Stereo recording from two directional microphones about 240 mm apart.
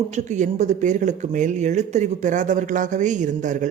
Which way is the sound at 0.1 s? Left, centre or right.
Right.